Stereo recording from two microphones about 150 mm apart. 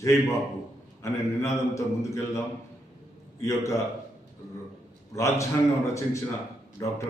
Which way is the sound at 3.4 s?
20° left (ahead or behind).